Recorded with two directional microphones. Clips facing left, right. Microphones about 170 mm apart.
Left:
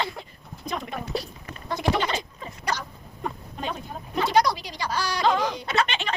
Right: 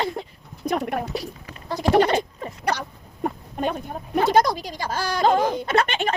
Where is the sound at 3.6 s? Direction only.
55° right (ahead or behind).